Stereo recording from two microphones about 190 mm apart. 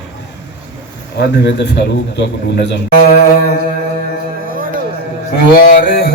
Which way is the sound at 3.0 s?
50° left (ahead or behind).